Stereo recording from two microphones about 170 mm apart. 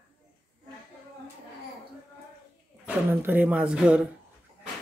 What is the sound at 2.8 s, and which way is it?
Speech, 10° right (ahead or behind).